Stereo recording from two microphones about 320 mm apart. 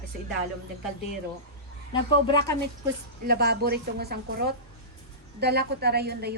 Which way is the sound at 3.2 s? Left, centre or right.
Right.